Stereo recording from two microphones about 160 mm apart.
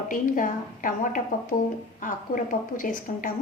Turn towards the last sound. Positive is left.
turn(degrees=55)  # may be behind; listen again after turning